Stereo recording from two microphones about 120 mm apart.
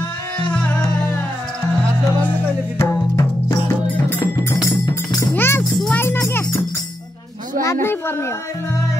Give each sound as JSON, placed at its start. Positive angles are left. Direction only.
{"t": 0.4, "sound": "music", "side_deg": 10}
{"t": 2.8, "sound": "music", "side_deg": 25}
{"t": 5.3, "sound": "music", "side_deg": 20}
{"t": 5.6, "sound": "music", "side_deg": 5}
{"t": 5.9, "sound": "music", "side_deg": 20}
{"t": 7.6, "sound": "a man's voice", "side_deg": 20}